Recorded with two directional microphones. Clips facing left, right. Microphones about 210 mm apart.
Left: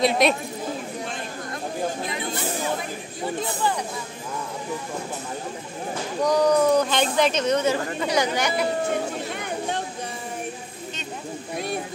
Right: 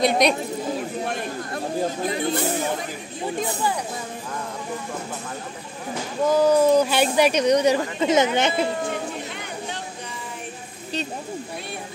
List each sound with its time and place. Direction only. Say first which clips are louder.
0.0 s speech: right 1 dB; centre (ahead or behind)
2.0 s speech: right 6 dB; 40° right (ahead or behind)
6.2 s speech: right 2 dB; 5° right (ahead or behind); by 8.6 s 25° right (ahead or behind)
9.4 s a sound: left 4 dB; 50° left (ahead or behind)